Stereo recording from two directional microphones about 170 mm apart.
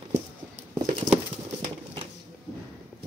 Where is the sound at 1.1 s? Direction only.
25° right (ahead or behind).